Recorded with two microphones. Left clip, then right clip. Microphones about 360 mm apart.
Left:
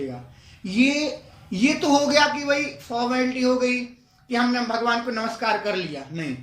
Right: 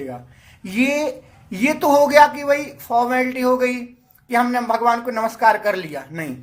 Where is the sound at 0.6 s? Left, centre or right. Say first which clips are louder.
Right 2 dB; right.